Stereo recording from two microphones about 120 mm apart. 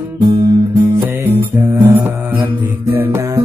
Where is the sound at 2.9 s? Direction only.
20° right (ahead or behind).